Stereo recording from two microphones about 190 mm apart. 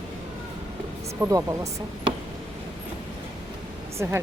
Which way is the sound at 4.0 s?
15° right (ahead or behind).